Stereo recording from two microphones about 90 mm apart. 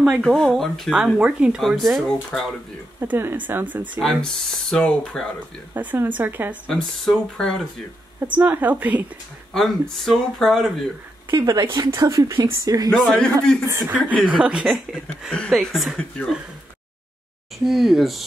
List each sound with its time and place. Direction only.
0.2 s speech: centre (ahead or behind)
3.0 s speech: 25° right (ahead or behind)
4.0 s speech: 5° left (ahead or behind)
5.8 s speech: 20° right (ahead or behind)
6.7 s speech: 5° left (ahead or behind)
8.3 s speech: 20° right (ahead or behind)
9.5 s speech: 5° left (ahead or behind)
11.3 s a woman's voice: 40° right (ahead or behind)
12.9 s a man's voice: 5° left (ahead or behind)
13.7 s speech: 30° right (ahead or behind)
14.2 s speech: 15° right (ahead or behind)
14.7 s speech: centre (ahead or behind)
17.6 s speech: centre (ahead or behind)